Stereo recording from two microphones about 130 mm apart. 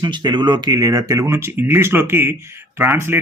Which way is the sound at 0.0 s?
30° right (ahead or behind).